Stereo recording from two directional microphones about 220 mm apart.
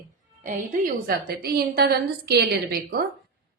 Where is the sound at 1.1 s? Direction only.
45° right (ahead or behind).